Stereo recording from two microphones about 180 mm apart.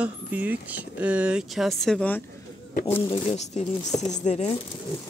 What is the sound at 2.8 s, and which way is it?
Speech, 15° left (ahead or behind).